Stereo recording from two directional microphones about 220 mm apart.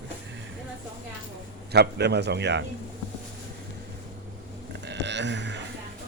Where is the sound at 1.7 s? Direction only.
50° right (ahead or behind).